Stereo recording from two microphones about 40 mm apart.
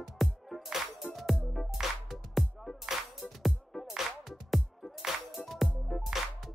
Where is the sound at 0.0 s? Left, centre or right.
Centre.